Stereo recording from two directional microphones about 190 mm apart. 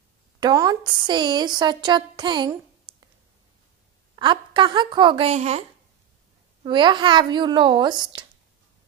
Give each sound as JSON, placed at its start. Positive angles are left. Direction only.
{"t": 0.4, "sound": "a woman's voice", "side_deg": -20}
{"t": 4.1, "sound": "a woman's voice", "side_deg": -25}
{"t": 6.6, "sound": "a woman's voice", "side_deg": -25}